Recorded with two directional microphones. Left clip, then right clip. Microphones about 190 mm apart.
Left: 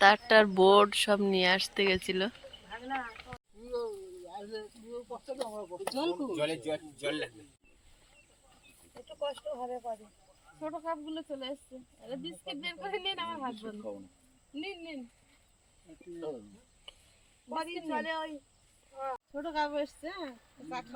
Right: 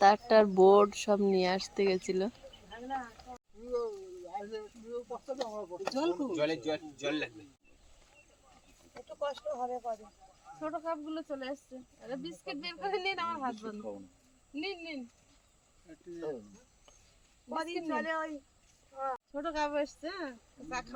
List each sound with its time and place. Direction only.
0.0 s speech: centre (ahead or behind)
2.0 s a sound: centre (ahead or behind)
3.7 s a sound: 35° right (ahead or behind)
4.9 s speech: 15° right (ahead or behind)
6.7 s speech: 10° left (ahead or behind)
9.0 s speech: 15° left (ahead or behind)
16.9 s a sound: centre (ahead or behind)
17.5 s speech: 5° left (ahead or behind)
19.3 s speech: 20° right (ahead or behind)